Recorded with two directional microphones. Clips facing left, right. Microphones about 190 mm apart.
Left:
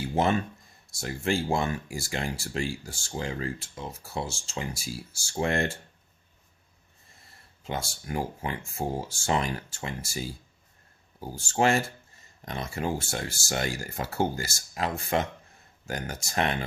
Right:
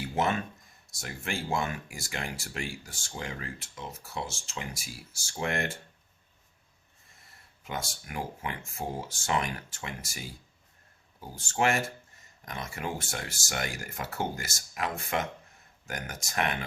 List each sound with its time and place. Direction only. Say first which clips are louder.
0.0 s a sound: left 4 dB; 30° left (ahead or behind)
0.9 s speech: left 8 dB; 30° left (ahead or behind)
7.6 s speech: left 3 dB; 30° left (ahead or behind)